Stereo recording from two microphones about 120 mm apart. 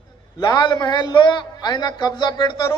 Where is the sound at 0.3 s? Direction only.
35° left (ahead or behind).